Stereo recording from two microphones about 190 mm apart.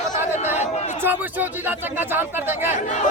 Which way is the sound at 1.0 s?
10° right (ahead or behind).